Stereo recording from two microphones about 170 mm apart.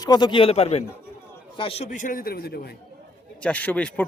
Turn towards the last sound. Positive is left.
turn(degrees=10)  # may be behind; listen again after turning